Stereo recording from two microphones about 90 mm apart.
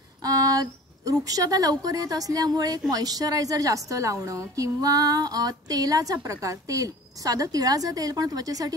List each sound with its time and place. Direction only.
0.2 s a woman's voice: 40° right (ahead or behind)